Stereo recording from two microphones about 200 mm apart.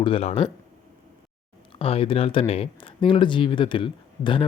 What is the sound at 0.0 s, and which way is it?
Speech, 30° left (ahead or behind).